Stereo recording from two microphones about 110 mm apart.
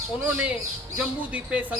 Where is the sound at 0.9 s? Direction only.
10° right (ahead or behind).